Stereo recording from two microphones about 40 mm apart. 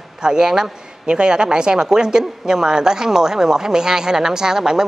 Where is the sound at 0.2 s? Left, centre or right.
Centre.